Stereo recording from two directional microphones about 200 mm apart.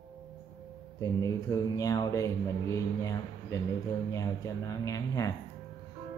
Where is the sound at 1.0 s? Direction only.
15° left (ahead or behind).